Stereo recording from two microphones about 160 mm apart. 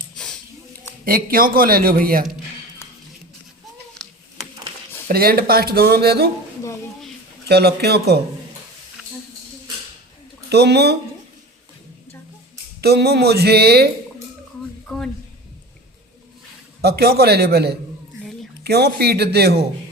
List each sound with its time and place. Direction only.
1.0 s a man's voice: 65° right (ahead or behind)
2.8 s a sound: 15° left (ahead or behind)
5.0 s speech: 70° right (ahead or behind)
7.4 s a man's voice: 85° right
10.5 s speech: 90° right
12.8 s speech: 90° right
14.8 s a sound: 5° left (ahead or behind)
16.8 s a man's voice: 80° right